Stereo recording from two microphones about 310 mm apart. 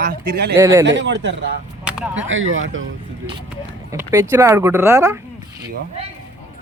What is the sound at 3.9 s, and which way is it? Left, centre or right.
Speech, centre.